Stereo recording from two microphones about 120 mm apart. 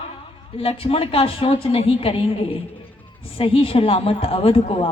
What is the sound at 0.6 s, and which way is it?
A woman's voice, 50° left (ahead or behind).